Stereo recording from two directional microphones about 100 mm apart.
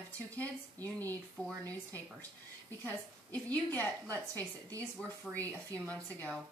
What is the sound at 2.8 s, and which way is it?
Speech, 15° left (ahead or behind).